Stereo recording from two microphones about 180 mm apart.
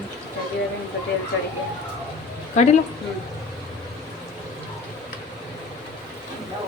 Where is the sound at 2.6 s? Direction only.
40° left (ahead or behind).